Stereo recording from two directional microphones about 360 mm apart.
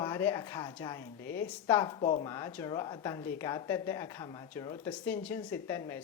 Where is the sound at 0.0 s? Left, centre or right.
Centre.